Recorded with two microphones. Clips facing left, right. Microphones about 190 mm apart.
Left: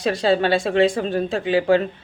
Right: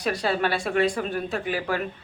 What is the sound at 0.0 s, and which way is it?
A woman's voice, 25° left (ahead or behind).